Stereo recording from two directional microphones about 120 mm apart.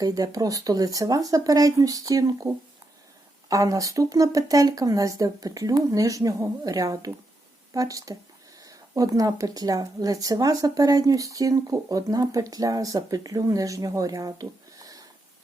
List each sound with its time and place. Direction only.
0.0 s speech: 30° right (ahead or behind)
3.5 s speech: 30° right (ahead or behind)